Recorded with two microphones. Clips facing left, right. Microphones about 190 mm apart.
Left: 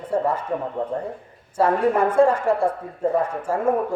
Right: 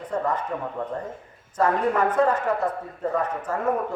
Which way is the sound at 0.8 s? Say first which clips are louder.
Left 4 dB; 25° left (ahead or behind).